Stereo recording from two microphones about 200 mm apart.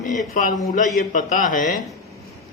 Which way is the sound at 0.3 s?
40° left (ahead or behind).